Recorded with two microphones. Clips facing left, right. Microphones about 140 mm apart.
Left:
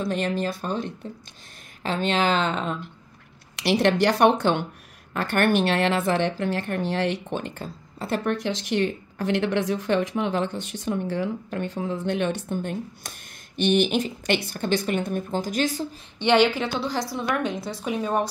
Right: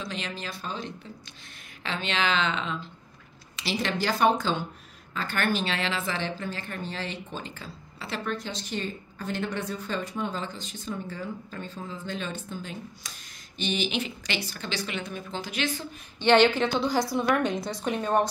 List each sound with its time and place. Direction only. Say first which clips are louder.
0.0 s speech: left 10 dB; 55° left (ahead or behind)
3.5 s a woman's voice: left 9 dB; 65° left (ahead or behind); by 8.4 s 50° left (ahead or behind)
8.4 s a woman's voice: left 9 dB; 90° left; by 15.9 s 40° left (ahead or behind)
16.2 s a woman's voice: even; 10° left (ahead or behind)